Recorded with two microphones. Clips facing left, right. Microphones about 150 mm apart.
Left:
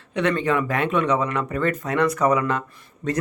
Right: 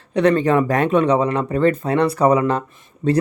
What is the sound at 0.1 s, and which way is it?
Speech, 35° right (ahead or behind).